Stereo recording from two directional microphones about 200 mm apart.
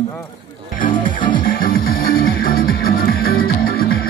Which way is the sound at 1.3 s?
45° left (ahead or behind).